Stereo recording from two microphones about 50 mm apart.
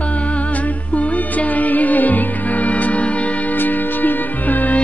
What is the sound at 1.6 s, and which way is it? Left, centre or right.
Music, left.